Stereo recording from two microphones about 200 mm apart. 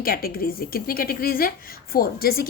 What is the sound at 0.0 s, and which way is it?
Speech, 50° left (ahead or behind).